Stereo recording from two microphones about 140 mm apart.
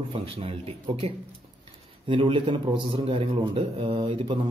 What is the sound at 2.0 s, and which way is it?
A man's voice, 35° right (ahead or behind).